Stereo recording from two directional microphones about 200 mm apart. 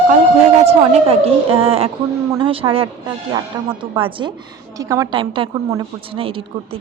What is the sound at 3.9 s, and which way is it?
Speech, 25° right (ahead or behind).